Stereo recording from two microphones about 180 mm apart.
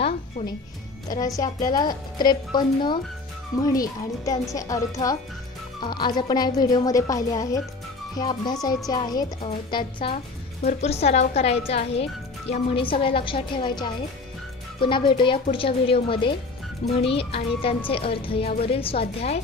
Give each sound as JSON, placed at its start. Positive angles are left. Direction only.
{"t": 0.4, "sound": "speech", "side_deg": 25}
{"t": 10.1, "sound": "a woman's voice", "side_deg": 40}